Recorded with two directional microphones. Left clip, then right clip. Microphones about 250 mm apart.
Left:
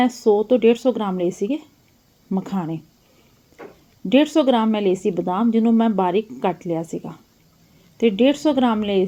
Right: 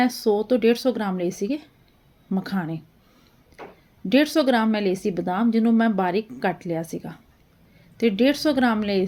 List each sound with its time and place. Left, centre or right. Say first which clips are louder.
0.0 s a woman's voice: left 4 dB; centre
4.3 s a woman's voice: left 3 dB; right